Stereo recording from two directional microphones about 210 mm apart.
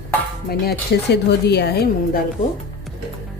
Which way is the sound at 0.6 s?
50° left (ahead or behind).